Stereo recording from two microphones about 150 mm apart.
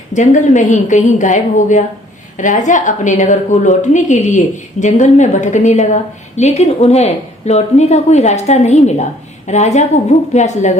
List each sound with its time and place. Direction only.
0.1 s a woman's voice: 55° left (ahead or behind)